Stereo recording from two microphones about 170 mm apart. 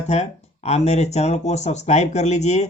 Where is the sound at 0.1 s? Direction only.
40° left (ahead or behind).